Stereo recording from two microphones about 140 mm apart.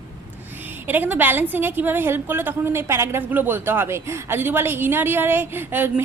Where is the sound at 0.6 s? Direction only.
15° right (ahead or behind).